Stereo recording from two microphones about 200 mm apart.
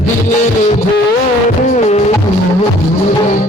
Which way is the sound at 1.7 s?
35° left (ahead or behind).